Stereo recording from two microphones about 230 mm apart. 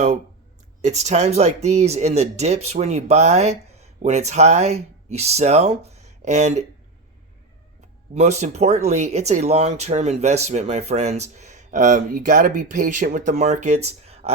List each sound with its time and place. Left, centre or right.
0.8 s speech: right
8.1 s speech: right